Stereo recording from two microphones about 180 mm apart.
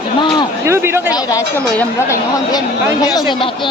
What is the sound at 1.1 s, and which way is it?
Speech, 20° left (ahead or behind).